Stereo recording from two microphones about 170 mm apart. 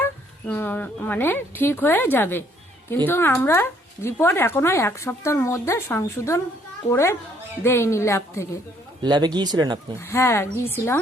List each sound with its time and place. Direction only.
0.0 s speech: 10° left (ahead or behind)
9.0 s speech: 25° right (ahead or behind)
10.0 s speech: 15° left (ahead or behind)